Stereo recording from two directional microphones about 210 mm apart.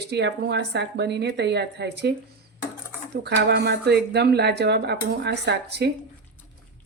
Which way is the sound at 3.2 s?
55° right (ahead or behind).